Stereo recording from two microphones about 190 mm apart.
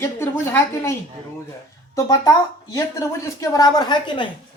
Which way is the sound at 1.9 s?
20° left (ahead or behind).